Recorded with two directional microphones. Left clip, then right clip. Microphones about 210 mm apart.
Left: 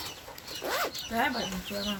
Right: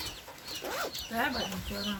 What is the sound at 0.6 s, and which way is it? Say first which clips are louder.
Zipper: left 5 dB; 15° left (ahead or behind).